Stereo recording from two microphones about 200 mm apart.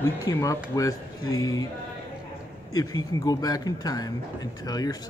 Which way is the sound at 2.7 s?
20° left (ahead or behind).